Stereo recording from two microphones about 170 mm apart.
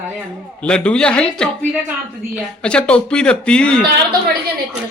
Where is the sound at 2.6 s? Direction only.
5° left (ahead or behind).